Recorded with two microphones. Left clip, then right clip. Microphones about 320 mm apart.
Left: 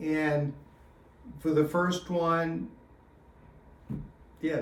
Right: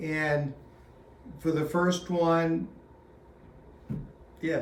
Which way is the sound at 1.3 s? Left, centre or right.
Centre.